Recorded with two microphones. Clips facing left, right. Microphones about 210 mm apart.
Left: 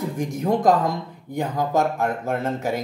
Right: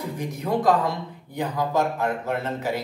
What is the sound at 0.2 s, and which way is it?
Speech, 45° left (ahead or behind).